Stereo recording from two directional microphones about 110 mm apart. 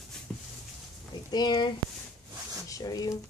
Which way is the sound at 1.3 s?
40° left (ahead or behind).